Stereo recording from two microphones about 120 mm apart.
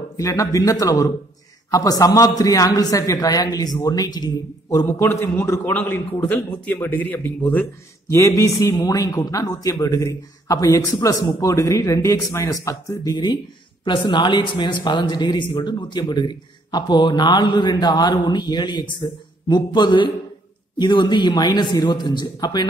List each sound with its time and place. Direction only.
0.2 s a man's voice: 30° left (ahead or behind)
4.8 s a man's voice: 20° left (ahead or behind)